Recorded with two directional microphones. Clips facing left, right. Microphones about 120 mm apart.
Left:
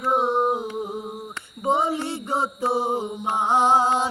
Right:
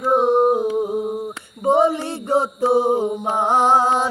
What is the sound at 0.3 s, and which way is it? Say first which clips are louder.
Music: right 6 dB; 45° right (ahead or behind).